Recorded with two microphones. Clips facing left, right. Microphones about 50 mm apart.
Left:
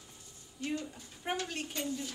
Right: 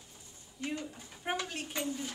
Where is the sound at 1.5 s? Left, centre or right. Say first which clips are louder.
Left 1 dB; centre.